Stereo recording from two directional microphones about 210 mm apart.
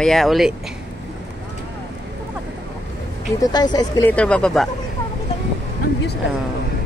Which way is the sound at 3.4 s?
20° left (ahead or behind).